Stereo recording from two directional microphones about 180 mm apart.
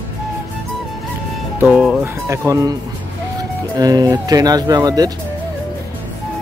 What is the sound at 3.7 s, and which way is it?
Speech, 20° right (ahead or behind).